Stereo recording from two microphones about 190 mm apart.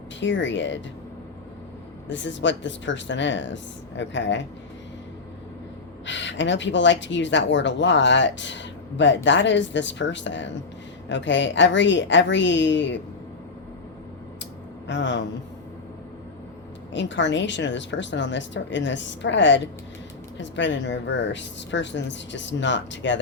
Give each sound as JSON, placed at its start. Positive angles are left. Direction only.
{"t": 0.2, "sound": "speech", "side_deg": 70}
{"t": 2.0, "sound": "speech", "side_deg": 70}
{"t": 6.1, "sound": "speech", "side_deg": 70}
{"t": 14.8, "sound": "a man's voice", "side_deg": 70}
{"t": 16.9, "sound": "speech", "side_deg": 70}